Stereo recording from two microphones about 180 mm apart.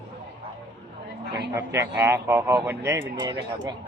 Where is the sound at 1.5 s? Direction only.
15° right (ahead or behind).